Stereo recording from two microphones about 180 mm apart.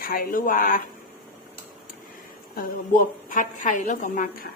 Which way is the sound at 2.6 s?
50° left (ahead or behind).